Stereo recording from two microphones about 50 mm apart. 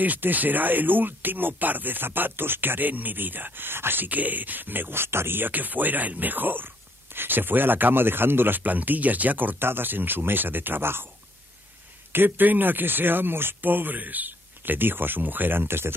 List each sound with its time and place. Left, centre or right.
0.0 s speech: right
12.1 s speech: right